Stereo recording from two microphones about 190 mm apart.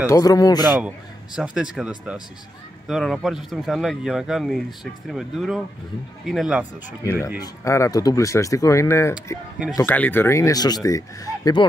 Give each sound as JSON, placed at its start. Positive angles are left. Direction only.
{"t": 0.1, "sound": "speech", "side_deg": 20}
{"t": 0.7, "sound": "speech", "side_deg": -5}
{"t": 7.0, "sound": "speech", "side_deg": 15}